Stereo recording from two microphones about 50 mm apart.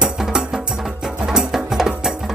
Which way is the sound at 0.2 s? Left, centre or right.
Centre.